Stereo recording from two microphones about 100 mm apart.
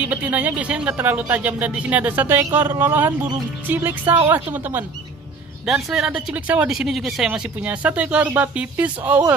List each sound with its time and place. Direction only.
0.0 s speech: 15° right (ahead or behind)
5.7 s speech: 5° right (ahead or behind)
6.7 s speech: 5° right (ahead or behind)